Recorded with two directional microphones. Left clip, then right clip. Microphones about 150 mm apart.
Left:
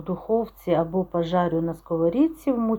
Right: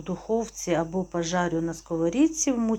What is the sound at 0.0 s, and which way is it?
Speech, 5° left (ahead or behind).